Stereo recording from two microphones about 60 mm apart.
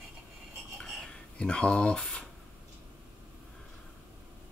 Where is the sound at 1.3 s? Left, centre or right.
Centre.